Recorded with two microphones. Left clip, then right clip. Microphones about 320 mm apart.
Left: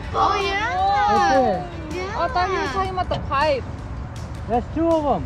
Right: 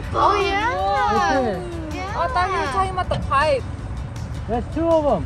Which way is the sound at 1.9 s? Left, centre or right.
Centre.